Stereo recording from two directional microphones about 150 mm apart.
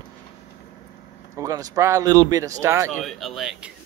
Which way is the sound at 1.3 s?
20° right (ahead or behind).